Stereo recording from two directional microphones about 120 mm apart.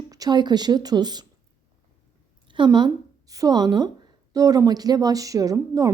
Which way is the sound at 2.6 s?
35° right (ahead or behind).